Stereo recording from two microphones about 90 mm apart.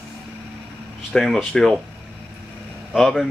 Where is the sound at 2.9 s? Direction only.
Centre (ahead or behind).